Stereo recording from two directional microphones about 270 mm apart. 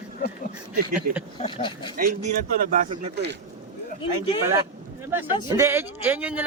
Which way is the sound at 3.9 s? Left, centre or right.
Centre.